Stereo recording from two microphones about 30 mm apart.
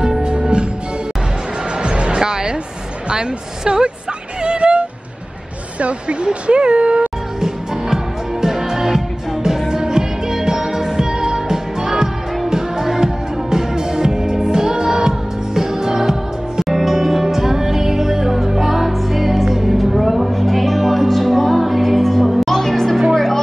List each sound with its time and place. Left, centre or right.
0.2 s music: right
1.8 s music: right
3.1 s a woman's voice: right
4.4 s music: right
5.8 s speech: right
7.3 s music: centre